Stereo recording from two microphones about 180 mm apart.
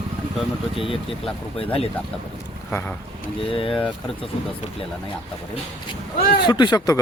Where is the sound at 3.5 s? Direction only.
30° left (ahead or behind).